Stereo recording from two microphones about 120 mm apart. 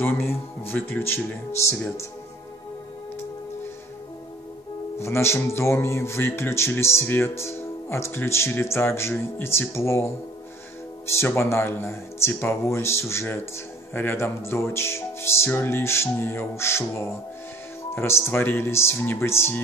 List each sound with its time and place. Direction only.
0.0 s speech: 20° left (ahead or behind)
4.9 s speech: 20° left (ahead or behind)